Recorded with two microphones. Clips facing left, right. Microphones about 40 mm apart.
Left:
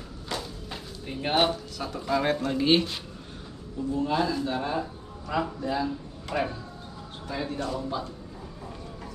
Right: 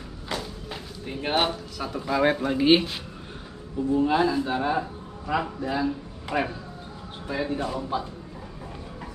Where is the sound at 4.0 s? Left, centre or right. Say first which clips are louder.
Right 4 dB; centre.